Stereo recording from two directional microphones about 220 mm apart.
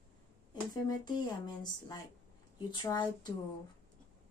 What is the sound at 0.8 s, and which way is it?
Speech, 20° left (ahead or behind).